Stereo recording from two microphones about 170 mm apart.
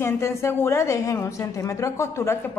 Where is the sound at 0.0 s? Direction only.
15° left (ahead or behind).